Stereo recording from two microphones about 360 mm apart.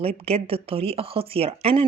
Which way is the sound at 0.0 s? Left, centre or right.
Centre.